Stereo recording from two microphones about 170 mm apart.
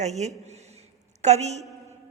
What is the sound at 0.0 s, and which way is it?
A man's voice, 40° right (ahead or behind).